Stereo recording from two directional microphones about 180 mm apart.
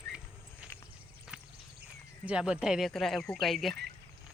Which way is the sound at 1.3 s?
5° right (ahead or behind).